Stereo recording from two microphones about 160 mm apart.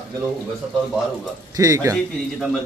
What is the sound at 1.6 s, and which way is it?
Speech, 20° right (ahead or behind).